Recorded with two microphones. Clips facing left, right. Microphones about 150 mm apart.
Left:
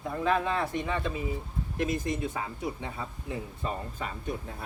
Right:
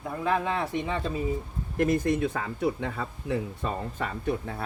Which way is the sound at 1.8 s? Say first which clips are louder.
Right 6 dB; 60° right (ahead or behind).